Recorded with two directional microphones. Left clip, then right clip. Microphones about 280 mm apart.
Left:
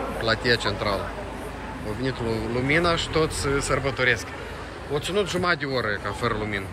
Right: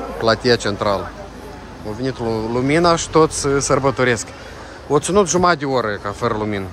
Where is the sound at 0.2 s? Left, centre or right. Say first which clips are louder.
Right 7 dB; right.